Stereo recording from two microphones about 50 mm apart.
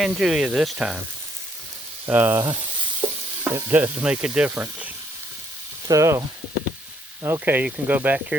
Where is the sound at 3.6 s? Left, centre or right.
Right.